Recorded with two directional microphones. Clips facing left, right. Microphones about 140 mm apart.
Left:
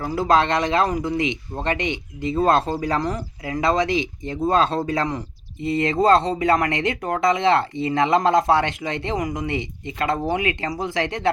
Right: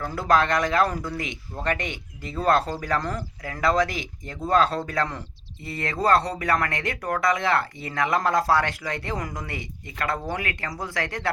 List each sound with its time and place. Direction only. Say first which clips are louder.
0.2 s speech: left 2 dB; 25° left (ahead or behind)